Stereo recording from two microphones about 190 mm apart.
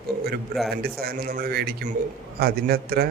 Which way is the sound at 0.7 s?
55° right (ahead or behind).